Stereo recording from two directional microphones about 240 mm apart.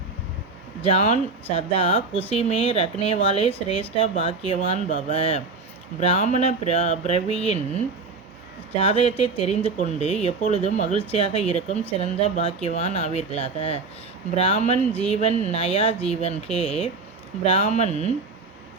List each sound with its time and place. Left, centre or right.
0.9 s speech: left
8.7 s speech: left